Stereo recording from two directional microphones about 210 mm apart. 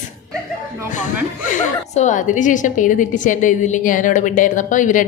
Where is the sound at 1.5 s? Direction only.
35° left (ahead or behind).